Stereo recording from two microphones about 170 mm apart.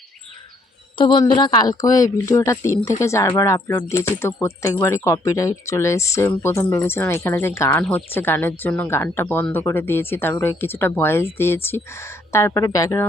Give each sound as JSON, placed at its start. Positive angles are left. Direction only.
{"t": 0.9, "sound": "speech", "side_deg": 25}